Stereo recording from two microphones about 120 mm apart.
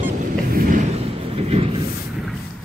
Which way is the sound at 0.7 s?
75° right (ahead or behind).